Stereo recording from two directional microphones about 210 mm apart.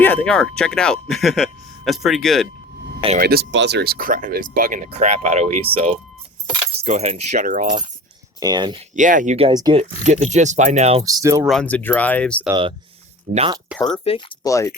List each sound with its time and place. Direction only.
0.0 s speech: 10° left (ahead or behind)
3.2 s speech: 45° right (ahead or behind)
8.4 s speech: 20° right (ahead or behind)
9.0 s speech: 40° right (ahead or behind)
9.5 s speech: 20° right (ahead or behind)
10.1 s speech: 35° right (ahead or behind)
11.0 s speech: 15° right (ahead or behind)
11.4 s speech: 5° left (ahead or behind)
12.5 s speech: 20° right (ahead or behind)
13.7 s speech: centre (ahead or behind)
13.9 s speech: 25° left (ahead or behind)
14.4 s speech: 15° left (ahead or behind)